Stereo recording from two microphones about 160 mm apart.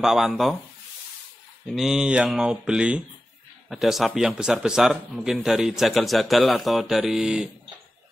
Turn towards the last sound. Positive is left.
turn(degrees=-5)  # may be behind; listen again after turning